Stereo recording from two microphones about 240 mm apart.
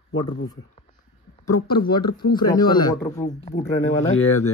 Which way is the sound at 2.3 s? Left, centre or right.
Centre.